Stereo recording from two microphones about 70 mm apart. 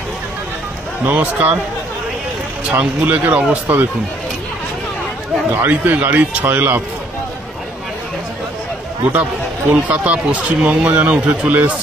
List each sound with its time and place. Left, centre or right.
1.0 s speech: right
2.7 s speech: right
5.5 s speech: right
9.7 s speech: right